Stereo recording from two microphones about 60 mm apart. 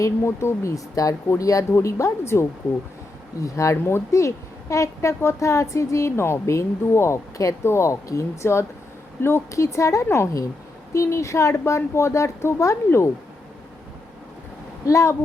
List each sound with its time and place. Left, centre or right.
0.0 s a woman's voice: left
1.7 s speech: left
3.4 s a woman's voice: left
7.6 s a woman's voice: left
14.8 s a woman's voice: left